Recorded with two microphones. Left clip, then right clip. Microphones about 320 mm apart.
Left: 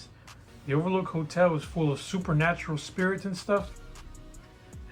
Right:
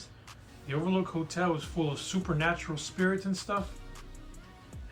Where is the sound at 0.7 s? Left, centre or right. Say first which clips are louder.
Left 4 dB; left.